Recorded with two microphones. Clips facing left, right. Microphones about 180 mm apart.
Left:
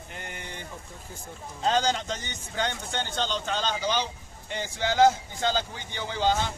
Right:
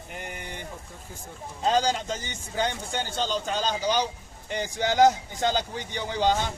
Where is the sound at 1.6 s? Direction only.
10° right (ahead or behind).